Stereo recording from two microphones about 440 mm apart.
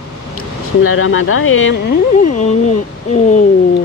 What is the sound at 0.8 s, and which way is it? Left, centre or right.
Speech, left.